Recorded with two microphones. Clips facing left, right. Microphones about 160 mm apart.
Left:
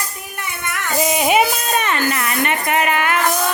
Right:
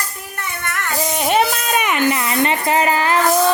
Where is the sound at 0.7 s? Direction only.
10° left (ahead or behind).